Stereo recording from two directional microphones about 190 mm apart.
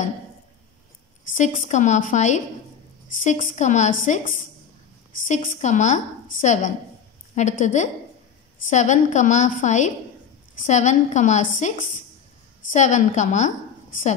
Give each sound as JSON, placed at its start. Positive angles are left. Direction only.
{"t": 1.3, "sound": "a woman's voice", "side_deg": 45}